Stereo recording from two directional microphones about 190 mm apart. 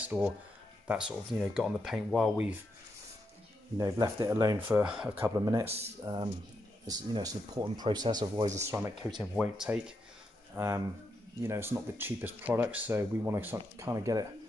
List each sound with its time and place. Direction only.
0.0 s speech: 5° right (ahead or behind)
3.7 s speech: 20° right (ahead or behind)
4.6 s speech: 5° right (ahead or behind)